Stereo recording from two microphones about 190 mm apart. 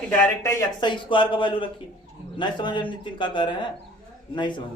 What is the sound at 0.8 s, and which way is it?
A man's voice, 25° left (ahead or behind).